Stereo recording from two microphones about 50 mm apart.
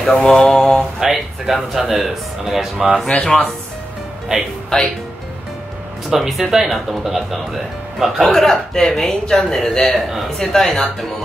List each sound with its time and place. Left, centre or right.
0.0 s a man's voice: centre
0.9 s speech: centre
3.1 s a man's voice: centre
4.7 s a man's voice: centre
6.0 s speech: centre
8.2 s a man's voice: centre